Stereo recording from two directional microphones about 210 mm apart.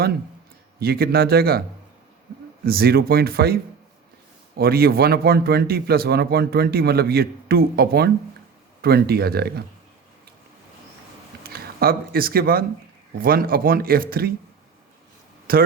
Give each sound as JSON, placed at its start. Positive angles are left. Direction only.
{"t": 0.8, "sound": "a man's voice", "side_deg": -45}
{"t": 2.6, "sound": "a man's voice", "side_deg": -45}
{"t": 11.4, "sound": "a man's voice", "side_deg": -45}
{"t": 15.5, "sound": "a man's voice", "side_deg": -45}